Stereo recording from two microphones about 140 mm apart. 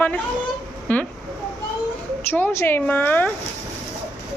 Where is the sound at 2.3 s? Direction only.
15° left (ahead or behind).